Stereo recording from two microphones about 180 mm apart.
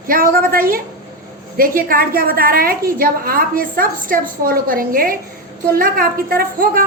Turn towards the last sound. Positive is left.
turn(degrees=-55)  # may be behind; listen again after turning